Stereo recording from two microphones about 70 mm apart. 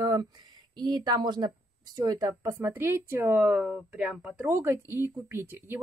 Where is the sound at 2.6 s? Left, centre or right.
Right.